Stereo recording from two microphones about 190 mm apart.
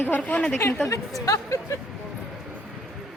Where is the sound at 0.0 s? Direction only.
10° left (ahead or behind).